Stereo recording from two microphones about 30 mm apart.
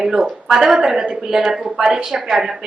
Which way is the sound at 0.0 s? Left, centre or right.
Centre.